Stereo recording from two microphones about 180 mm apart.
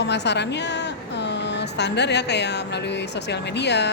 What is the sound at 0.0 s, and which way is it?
A woman's voice, 75° left (ahead or behind).